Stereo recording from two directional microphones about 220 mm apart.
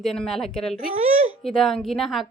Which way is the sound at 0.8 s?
30° right (ahead or behind).